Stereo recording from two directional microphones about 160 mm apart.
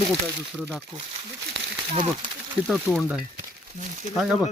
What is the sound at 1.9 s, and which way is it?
Speech, 30° right (ahead or behind).